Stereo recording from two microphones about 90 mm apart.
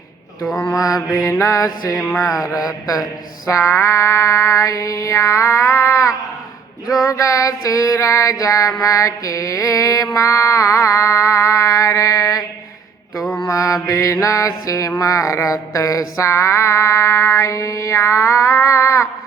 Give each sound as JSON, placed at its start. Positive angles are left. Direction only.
{"t": 1.1, "sound": "mantra", "side_deg": 35}
{"t": 2.5, "sound": "female singing", "side_deg": -10}
{"t": 2.8, "sound": "mantra", "side_deg": 40}
{"t": 6.8, "sound": "female singing", "side_deg": -5}
{"t": 7.1, "sound": "mantra", "side_deg": 35}
{"t": 13.4, "sound": "mantra", "side_deg": 35}